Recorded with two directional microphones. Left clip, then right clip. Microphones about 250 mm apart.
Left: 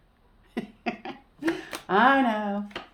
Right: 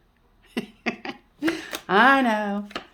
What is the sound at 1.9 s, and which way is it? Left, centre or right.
Speech, right.